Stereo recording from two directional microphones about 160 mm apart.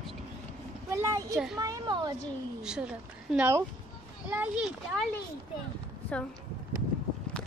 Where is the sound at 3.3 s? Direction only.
15° right (ahead or behind).